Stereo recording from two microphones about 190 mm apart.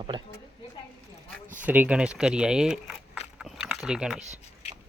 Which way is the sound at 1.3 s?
10° left (ahead or behind).